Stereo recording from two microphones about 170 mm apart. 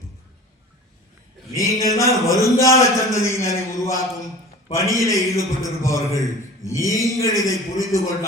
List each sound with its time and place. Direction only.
1.5 s a man's voice: 20° left (ahead or behind)